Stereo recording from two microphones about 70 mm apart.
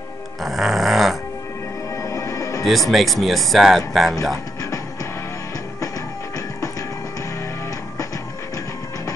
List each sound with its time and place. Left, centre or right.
0.4 s speech: centre
2.0 s music: left
2.6 s speech: centre